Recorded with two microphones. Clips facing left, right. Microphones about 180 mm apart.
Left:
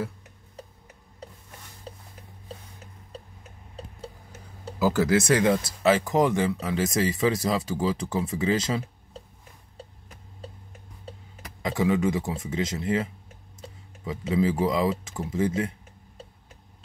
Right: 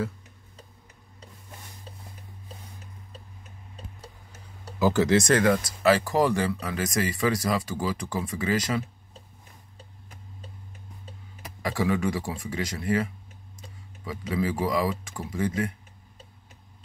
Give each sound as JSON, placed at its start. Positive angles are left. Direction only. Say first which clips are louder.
{"t": 4.7, "sound": "speech", "louder": "right 1 dB", "side_deg": 5}
{"t": 5.4, "sound": "speech", "louder": "even", "side_deg": 25}
{"t": 11.6, "sound": "speech", "louder": "left 2 dB", "side_deg": 20}